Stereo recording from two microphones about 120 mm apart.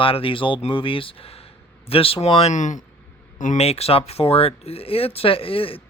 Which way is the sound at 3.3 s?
75° left (ahead or behind).